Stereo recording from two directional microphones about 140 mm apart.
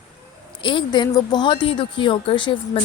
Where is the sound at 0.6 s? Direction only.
35° left (ahead or behind).